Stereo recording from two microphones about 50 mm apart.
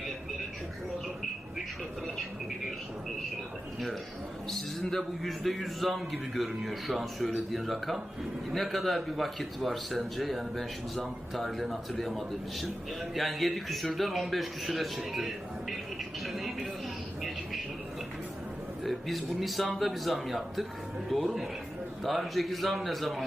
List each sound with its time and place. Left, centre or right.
4.4 s a man's voice: centre
16.2 s a sound: centre
18.8 s a man's voice: centre